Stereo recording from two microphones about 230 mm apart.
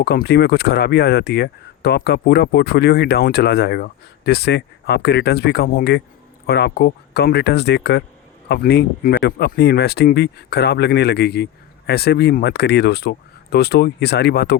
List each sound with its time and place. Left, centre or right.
0.0 s speech: left